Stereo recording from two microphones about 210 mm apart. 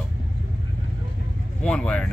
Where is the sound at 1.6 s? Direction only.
5° left (ahead or behind).